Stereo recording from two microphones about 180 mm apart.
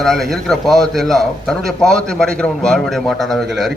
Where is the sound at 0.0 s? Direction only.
Centre (ahead or behind).